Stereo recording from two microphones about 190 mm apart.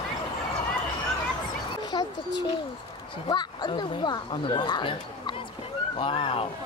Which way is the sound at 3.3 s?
25° left (ahead or behind).